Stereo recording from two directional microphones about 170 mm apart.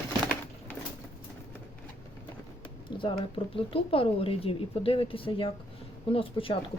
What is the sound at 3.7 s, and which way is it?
A woman's voice, 30° left (ahead or behind).